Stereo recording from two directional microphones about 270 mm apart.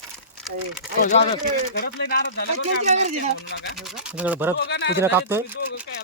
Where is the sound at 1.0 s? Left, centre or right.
Left.